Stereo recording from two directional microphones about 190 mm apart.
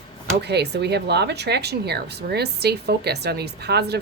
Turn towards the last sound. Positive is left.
turn(degrees=-60)  # may be behind; listen again after turning